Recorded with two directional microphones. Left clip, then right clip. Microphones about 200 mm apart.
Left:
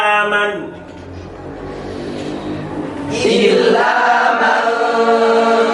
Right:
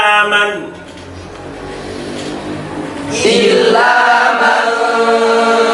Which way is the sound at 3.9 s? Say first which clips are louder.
Right 3 dB; 10° left (ahead or behind).